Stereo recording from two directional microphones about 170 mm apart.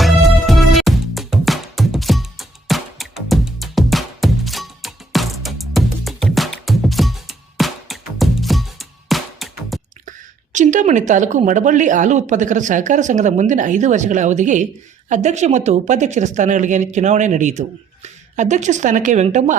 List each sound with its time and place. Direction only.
0.0 s music: centre (ahead or behind)
10.1 s a woman's voice: 45° right (ahead or behind)